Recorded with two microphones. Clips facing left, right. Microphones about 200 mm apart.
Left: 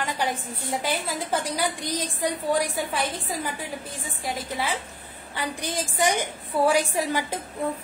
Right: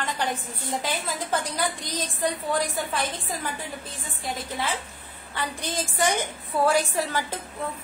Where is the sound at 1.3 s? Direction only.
10° left (ahead or behind).